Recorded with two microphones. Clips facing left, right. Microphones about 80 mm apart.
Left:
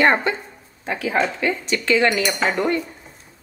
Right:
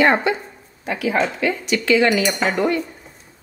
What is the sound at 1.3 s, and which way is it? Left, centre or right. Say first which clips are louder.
Speech: right 2 dB; left.